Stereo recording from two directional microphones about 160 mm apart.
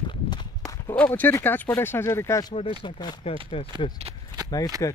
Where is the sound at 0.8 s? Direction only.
10° left (ahead or behind); by 3.7 s 35° left (ahead or behind).